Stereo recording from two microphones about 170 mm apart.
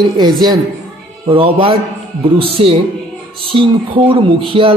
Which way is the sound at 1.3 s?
30° right (ahead or behind).